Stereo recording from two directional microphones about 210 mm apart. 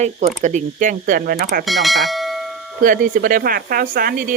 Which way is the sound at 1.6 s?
Centre (ahead or behind).